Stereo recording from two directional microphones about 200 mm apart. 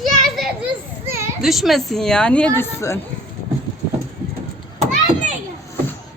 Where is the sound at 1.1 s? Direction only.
15° right (ahead or behind).